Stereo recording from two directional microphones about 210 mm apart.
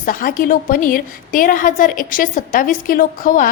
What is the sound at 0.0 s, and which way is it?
A woman's voice, 40° left (ahead or behind).